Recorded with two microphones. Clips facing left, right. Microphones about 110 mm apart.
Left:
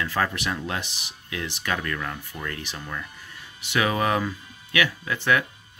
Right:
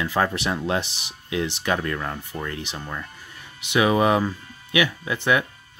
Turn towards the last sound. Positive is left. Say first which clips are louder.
# right 2 dB
turn(degrees=-15)  # may be behind; listen again after turning